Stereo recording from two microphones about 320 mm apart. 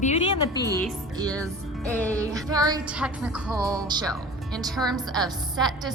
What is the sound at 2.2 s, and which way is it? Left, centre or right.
Music, centre.